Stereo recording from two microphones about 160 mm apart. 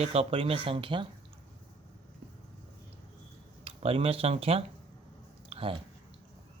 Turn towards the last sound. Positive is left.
turn(degrees=-35)  # may be behind; listen again after turning